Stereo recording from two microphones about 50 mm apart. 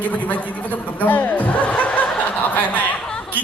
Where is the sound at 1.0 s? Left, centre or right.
Left.